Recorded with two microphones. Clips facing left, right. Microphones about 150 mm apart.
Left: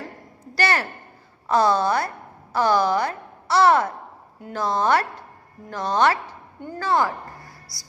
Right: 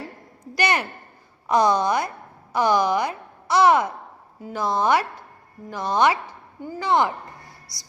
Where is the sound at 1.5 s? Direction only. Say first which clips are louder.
Even; 15° right (ahead or behind).